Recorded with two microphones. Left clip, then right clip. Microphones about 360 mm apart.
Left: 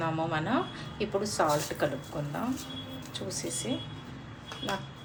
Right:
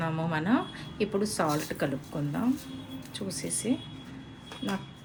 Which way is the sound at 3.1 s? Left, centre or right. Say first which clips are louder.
Even; right.